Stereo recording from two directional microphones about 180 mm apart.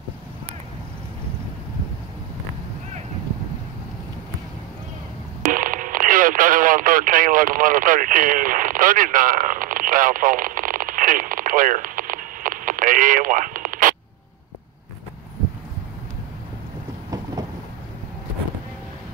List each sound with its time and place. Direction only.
5.4 s radio: 50° right (ahead or behind)